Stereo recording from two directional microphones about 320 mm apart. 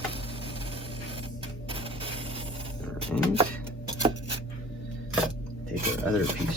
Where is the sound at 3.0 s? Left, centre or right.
Centre.